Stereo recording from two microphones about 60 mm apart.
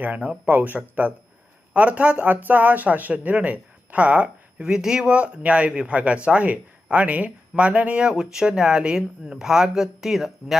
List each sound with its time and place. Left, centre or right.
0.0 s speech: right; by 10.6 s centre